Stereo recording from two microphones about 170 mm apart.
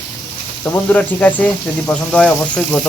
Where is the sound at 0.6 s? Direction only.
10° left (ahead or behind).